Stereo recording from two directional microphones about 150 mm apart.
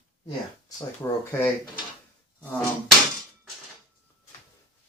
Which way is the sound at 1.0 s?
15° left (ahead or behind).